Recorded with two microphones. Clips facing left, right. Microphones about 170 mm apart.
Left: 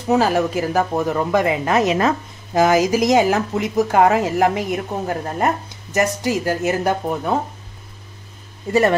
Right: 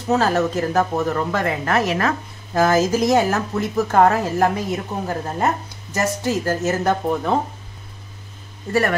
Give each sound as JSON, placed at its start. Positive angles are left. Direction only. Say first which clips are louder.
{"t": 0.1, "sound": "speech", "louder": "left 1 dB", "side_deg": 15}